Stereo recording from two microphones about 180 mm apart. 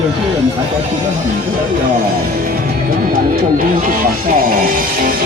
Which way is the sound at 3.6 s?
50° right (ahead or behind).